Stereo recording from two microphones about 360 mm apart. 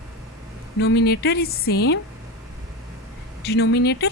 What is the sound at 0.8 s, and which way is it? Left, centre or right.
A woman's voice, left.